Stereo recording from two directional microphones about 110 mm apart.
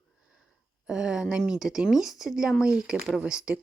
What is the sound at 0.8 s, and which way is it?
Speech, 5° right (ahead or behind).